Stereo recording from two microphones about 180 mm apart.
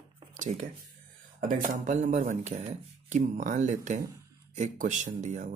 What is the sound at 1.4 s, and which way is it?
Speech, 50° right (ahead or behind).